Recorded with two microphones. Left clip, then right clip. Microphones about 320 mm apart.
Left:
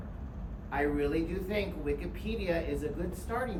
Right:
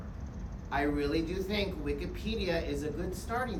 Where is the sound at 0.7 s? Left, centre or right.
Centre.